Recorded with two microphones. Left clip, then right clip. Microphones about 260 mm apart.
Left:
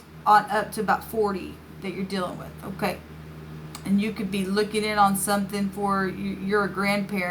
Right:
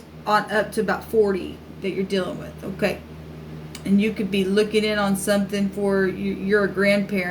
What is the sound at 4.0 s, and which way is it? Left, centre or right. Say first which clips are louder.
Speech: right 8 dB; left.